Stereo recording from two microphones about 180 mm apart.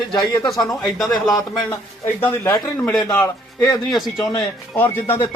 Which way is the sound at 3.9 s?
Centre (ahead or behind).